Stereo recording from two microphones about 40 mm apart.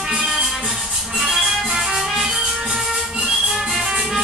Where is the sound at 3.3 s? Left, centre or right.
Centre.